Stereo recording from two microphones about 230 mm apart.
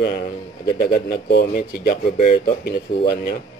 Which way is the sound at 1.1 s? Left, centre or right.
Left.